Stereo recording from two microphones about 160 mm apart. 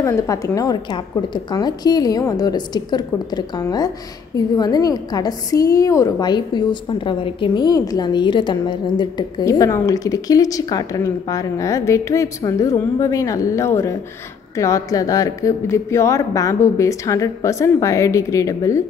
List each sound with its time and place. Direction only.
0.0 s a woman's voice: 20° left (ahead or behind)